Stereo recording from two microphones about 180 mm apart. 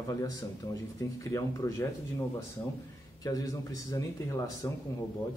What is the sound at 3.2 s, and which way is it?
Speech, 20° left (ahead or behind).